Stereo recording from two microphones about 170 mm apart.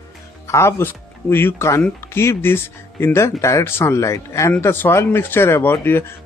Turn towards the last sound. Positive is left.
turn(degrees=15)  # may be behind; listen again after turning